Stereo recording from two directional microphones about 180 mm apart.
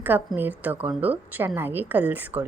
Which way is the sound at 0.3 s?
10° right (ahead or behind).